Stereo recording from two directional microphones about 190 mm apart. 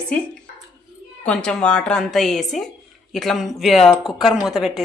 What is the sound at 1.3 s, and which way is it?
Speech, 5° left (ahead or behind).